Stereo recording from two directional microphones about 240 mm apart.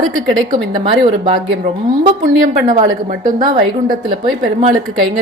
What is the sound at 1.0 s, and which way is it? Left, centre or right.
Speech, right.